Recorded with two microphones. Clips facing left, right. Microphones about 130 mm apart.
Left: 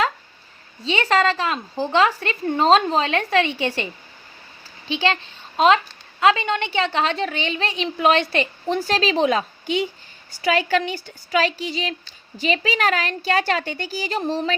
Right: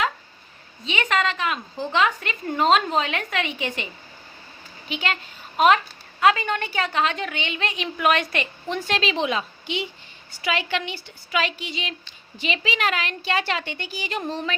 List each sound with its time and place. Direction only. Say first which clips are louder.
0.9 s a woman's voice: left 5 dB; 35° left (ahead or behind)
4.9 s a woman's voice: left 6 dB; 30° left (ahead or behind)